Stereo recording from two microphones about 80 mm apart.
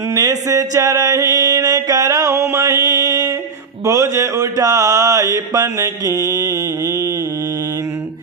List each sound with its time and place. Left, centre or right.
0.1 s music: right
3.8 s mantra: right